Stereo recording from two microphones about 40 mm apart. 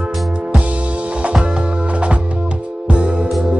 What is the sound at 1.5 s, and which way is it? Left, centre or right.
Music, right.